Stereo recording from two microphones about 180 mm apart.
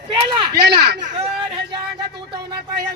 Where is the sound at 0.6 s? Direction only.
65° right (ahead or behind).